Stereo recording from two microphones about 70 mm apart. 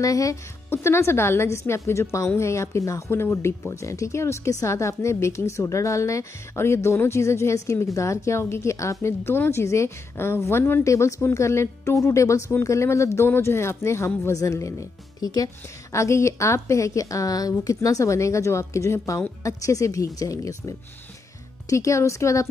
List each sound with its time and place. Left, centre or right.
0.0 s a woman's voice: left
0.7 s a woman's voice: left
10.8 s a woman's voice: left
15.1 s speech: left
15.9 s a woman's voice: left